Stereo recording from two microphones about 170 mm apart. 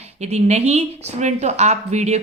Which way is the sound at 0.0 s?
40° right (ahead or behind).